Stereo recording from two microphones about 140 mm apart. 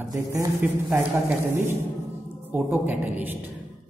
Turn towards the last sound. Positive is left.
turn(degrees=-15)  # may be behind; listen again after turning